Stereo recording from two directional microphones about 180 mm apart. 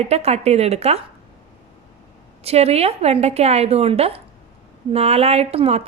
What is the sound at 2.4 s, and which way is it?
A woman's voice, 35° right (ahead or behind).